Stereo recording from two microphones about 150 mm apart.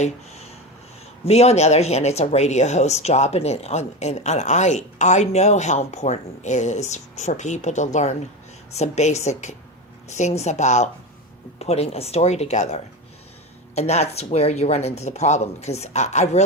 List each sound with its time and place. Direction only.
0.0 s speech: 45° left (ahead or behind)